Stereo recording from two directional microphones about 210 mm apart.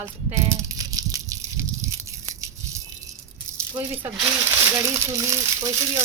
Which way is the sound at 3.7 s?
25° right (ahead or behind).